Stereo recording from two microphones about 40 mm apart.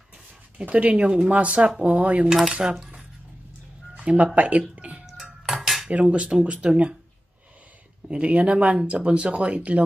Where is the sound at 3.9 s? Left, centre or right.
Right.